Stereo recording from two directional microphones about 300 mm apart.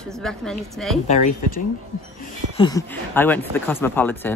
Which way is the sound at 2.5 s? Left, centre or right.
Centre.